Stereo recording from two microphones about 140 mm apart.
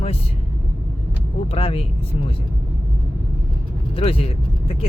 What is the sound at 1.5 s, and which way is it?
Speech, 45° left (ahead or behind).